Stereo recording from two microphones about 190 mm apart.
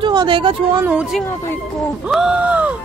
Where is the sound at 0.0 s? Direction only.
25° right (ahead or behind).